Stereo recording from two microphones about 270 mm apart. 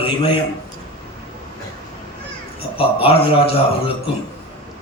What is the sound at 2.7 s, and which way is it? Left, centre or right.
Speech, left.